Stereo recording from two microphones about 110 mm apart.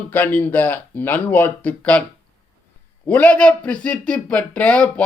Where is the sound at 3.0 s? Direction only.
10° left (ahead or behind).